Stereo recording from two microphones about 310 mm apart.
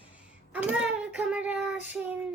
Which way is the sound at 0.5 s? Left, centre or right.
Centre.